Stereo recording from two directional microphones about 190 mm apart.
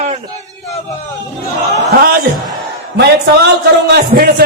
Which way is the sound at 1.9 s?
50° right (ahead or behind).